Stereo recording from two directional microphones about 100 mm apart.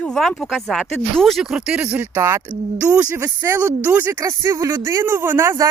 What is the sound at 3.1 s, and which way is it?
Speech, 25° right (ahead or behind).